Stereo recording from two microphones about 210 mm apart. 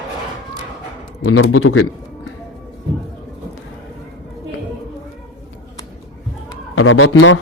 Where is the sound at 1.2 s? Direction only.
85° left.